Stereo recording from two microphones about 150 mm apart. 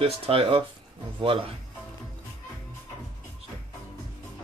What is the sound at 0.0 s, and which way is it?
Speech, 40° right (ahead or behind).